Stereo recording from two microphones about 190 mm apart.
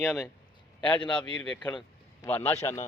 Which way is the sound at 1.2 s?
5° left (ahead or behind).